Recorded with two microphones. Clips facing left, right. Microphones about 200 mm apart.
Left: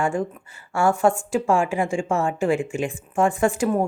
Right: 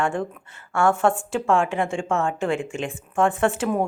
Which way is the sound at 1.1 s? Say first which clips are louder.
Left 2 dB; 15° left (ahead or behind).